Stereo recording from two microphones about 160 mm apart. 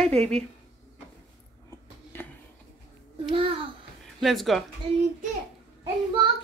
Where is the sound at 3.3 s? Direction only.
35° right (ahead or behind).